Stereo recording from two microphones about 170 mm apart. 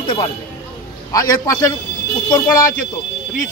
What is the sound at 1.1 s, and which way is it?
Speech, 20° left (ahead or behind).